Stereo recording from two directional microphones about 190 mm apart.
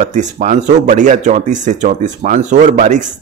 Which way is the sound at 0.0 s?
40° right (ahead or behind).